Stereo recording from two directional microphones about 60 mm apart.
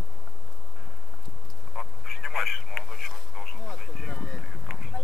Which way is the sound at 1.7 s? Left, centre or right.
Centre.